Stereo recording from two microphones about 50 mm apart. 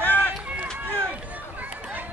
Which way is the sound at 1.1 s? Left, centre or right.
Right.